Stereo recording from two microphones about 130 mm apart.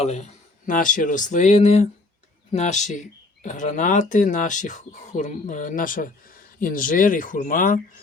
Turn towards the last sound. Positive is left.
turn(degrees=90)